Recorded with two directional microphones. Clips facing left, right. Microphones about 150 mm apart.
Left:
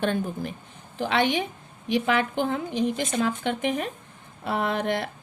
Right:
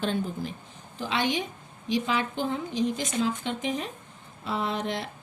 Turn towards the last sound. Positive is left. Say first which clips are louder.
# left 4 dB
turn(degrees=55)  # may be behind; listen again after turning